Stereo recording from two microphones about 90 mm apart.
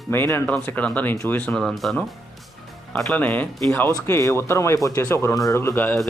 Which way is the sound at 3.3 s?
20° left (ahead or behind).